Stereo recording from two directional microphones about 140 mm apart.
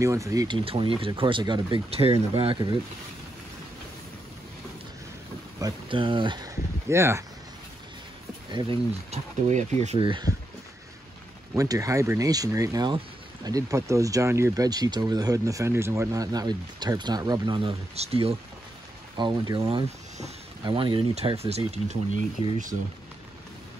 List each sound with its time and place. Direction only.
0.0 s speech: 20° right (ahead or behind)
0.7 s speech: 40° right (ahead or behind)
5.6 s speech: 35° right (ahead or behind)
6.9 s speech: 20° right (ahead or behind)
8.5 s speech: 35° right (ahead or behind)
9.1 s speech: 55° right (ahead or behind)
9.9 s speech: 35° right (ahead or behind)
11.5 s speech: 25° right (ahead or behind); by 18.3 s 45° right (ahead or behind)
19.1 s speech: 30° right (ahead or behind); by 21.9 s 45° right (ahead or behind)
22.1 s speech: 65° right (ahead or behind)